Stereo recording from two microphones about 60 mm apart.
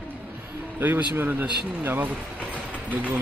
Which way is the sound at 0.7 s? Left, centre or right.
Right.